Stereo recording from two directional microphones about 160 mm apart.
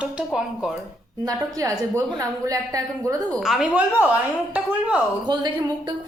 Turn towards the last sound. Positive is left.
turn(degrees=-25)  # may be behind; listen again after turning